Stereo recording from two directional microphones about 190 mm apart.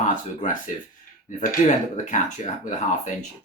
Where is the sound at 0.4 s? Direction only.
40° left (ahead or behind).